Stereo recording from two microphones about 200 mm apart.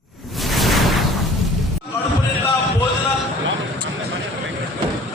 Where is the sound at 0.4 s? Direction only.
Centre (ahead or behind).